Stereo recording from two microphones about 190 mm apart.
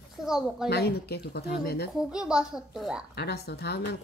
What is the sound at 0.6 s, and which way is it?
Speech, 60° left (ahead or behind).